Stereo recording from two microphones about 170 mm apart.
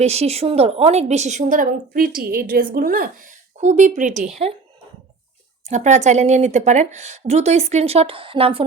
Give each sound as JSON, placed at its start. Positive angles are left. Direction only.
{"t": 0.0, "sound": "a woman's voice", "side_deg": -40}
{"t": 3.6, "sound": "a woman's voice", "side_deg": -45}
{"t": 5.6, "sound": "speech", "side_deg": -40}